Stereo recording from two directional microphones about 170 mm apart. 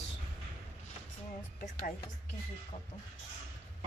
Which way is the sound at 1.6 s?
55° left (ahead or behind).